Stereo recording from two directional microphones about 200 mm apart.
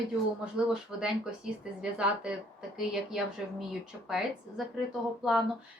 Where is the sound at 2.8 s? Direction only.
5° right (ahead or behind).